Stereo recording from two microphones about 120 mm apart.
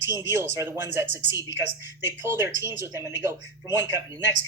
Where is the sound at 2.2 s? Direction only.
20° right (ahead or behind).